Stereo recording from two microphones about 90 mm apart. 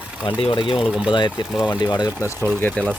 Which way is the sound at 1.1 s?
60° left (ahead or behind).